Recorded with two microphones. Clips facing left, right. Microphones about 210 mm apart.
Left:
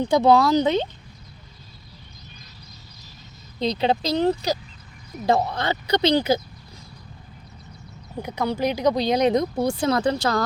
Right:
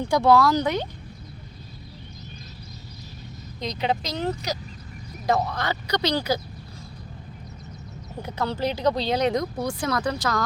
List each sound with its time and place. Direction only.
0.0 s speech: 20° left (ahead or behind)
3.6 s speech: 30° left (ahead or behind)
8.2 s speech: 15° left (ahead or behind); by 10.4 s 30° left (ahead or behind)